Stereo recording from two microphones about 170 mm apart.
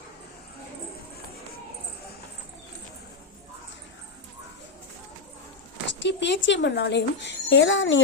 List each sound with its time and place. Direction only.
5.8 s speech: 90° left